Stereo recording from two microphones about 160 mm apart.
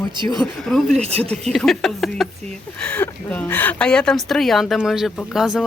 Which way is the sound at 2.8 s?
10° left (ahead or behind).